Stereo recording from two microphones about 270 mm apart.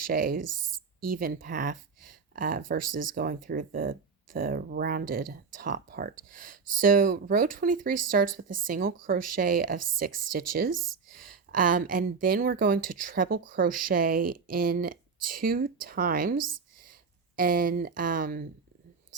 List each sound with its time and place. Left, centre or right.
0.1 s speech: right